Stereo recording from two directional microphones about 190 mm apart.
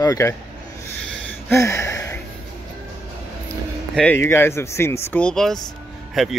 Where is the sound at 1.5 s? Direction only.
15° left (ahead or behind).